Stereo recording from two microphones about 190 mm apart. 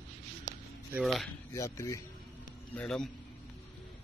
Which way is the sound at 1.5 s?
15° left (ahead or behind).